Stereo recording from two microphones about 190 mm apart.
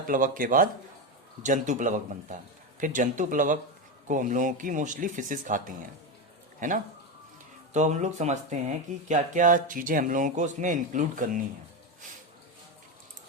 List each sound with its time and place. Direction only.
0.1 s speech: 45° right (ahead or behind)